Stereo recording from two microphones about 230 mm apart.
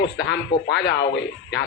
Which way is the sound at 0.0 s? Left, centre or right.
Left.